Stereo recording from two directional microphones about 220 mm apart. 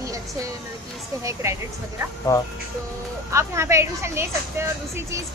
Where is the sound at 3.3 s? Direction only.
15° right (ahead or behind).